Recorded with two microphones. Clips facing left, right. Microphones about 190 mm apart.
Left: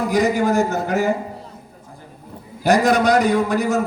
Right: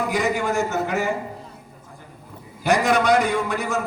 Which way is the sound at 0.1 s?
35° left (ahead or behind).